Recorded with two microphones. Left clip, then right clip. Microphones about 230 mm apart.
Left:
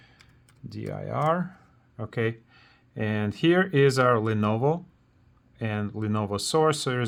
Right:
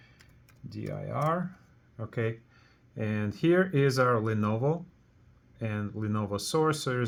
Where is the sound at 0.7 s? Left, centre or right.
Left.